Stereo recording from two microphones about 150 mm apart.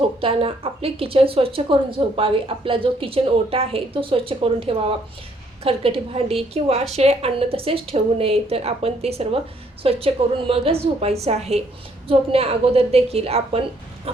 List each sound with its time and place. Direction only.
0.2 s a woman's voice: 40° right (ahead or behind)